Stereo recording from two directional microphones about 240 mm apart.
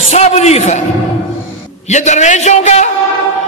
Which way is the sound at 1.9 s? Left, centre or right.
Left.